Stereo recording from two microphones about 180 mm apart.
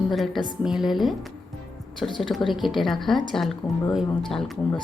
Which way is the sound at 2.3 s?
Centre (ahead or behind).